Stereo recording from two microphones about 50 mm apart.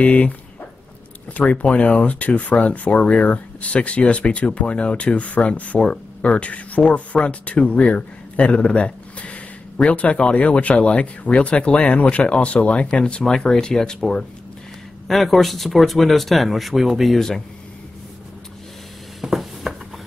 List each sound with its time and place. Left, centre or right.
0.0 s a man's voice: left
15.0 s speech: centre
19.2 s a sound: centre